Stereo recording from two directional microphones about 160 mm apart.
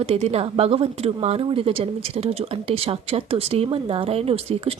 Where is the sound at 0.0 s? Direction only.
40° right (ahead or behind).